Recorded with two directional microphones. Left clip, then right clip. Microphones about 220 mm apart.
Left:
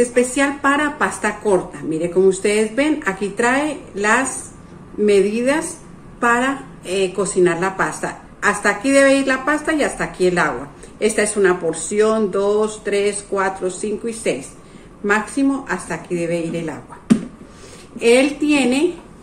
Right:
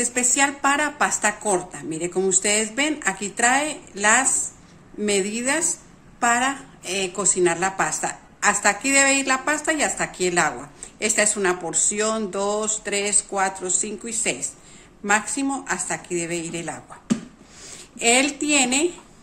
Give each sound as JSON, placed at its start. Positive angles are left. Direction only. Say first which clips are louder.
{"t": 0.0, "sound": "a woman's voice", "louder": "left 5 dB", "side_deg": -45}
{"t": 17.9, "sound": "a woman's voice", "louder": "left 6 dB", "side_deg": -50}